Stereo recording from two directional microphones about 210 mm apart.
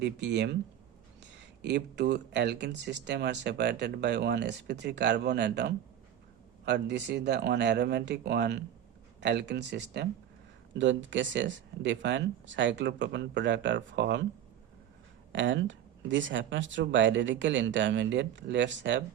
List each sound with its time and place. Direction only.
0.0 s speech: 55° right (ahead or behind)
1.6 s speech: 55° right (ahead or behind)
15.3 s speech: 60° right (ahead or behind)